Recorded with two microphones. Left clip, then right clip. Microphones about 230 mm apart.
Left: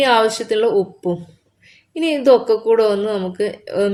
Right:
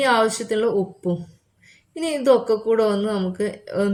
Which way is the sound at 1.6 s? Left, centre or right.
Left.